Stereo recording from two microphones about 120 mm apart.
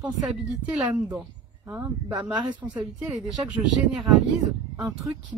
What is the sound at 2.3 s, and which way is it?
Speech, 40° right (ahead or behind).